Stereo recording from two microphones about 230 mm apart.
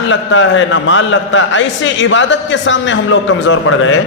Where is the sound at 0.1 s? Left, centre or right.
Left.